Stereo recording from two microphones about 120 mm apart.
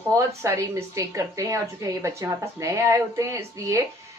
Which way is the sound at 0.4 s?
25° right (ahead or behind).